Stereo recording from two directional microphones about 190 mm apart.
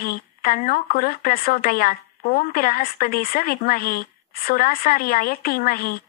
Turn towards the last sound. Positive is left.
turn(degrees=50)  # may be behind; listen again after turning